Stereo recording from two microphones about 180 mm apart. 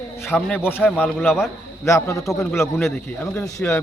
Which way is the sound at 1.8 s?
15° left (ahead or behind).